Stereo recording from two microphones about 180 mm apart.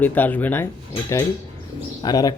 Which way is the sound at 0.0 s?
10° left (ahead or behind).